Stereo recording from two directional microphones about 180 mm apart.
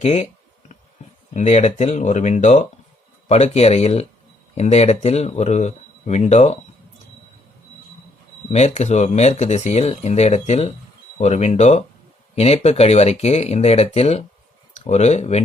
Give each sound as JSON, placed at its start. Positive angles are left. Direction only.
{"t": 0.0, "sound": "speech", "side_deg": 35}
{"t": 1.3, "sound": "speech", "side_deg": 40}
{"t": 8.5, "sound": "speech", "side_deg": 40}